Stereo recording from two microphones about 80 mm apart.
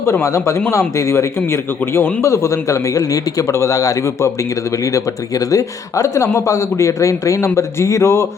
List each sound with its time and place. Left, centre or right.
0.0 s speech: left